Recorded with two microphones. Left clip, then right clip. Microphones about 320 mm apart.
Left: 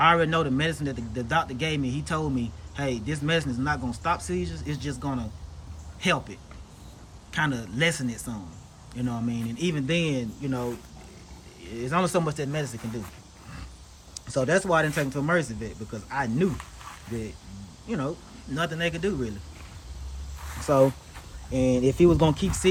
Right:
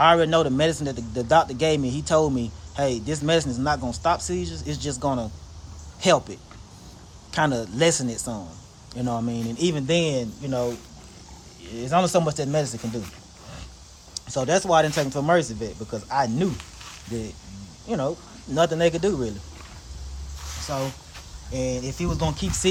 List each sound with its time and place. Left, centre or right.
0.0 s a man's voice: centre
11.8 s a man's voice: centre
14.1 s a man's voice: centre
17.8 s a man's voice: centre
21.5 s speech: centre